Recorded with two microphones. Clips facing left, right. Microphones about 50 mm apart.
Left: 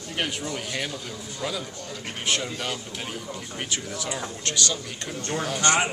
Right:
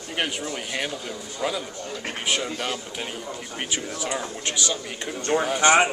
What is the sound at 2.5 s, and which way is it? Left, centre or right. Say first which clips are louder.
Speech: right 2 dB; centre.